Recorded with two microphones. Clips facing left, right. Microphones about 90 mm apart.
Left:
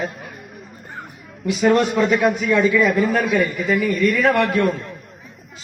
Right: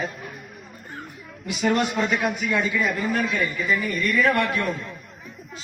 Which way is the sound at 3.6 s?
60° left (ahead or behind).